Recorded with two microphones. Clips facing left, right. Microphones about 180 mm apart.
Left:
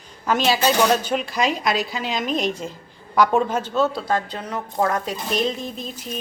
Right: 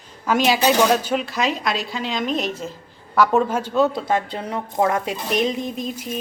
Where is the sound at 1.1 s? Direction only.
Centre (ahead or behind).